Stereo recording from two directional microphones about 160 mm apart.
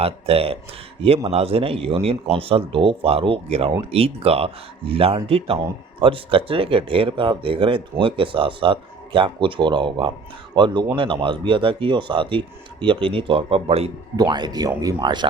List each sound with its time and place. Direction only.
0.0 s speech: 35° right (ahead or behind)
14.2 s speech: 25° right (ahead or behind)